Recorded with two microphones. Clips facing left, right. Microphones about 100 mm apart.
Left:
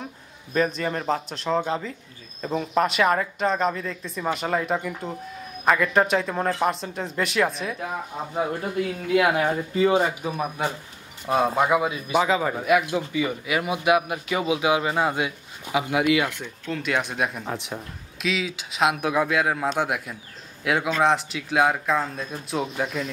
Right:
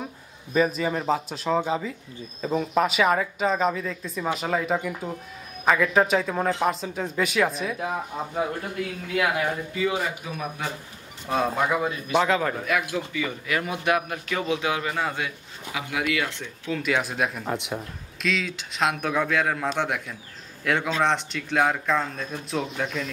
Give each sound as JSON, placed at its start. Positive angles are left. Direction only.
{"t": 0.5, "sound": "a man's voice", "side_deg": -5}
{"t": 9.1, "sound": "speech", "side_deg": 25}
{"t": 11.2, "sound": "speech", "side_deg": 10}
{"t": 12.6, "sound": "speech", "side_deg": 20}
{"t": 16.6, "sound": "a man's voice", "side_deg": 0}